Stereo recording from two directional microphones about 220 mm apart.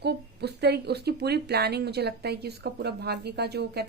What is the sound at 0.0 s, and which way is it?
Speech, 50° right (ahead or behind).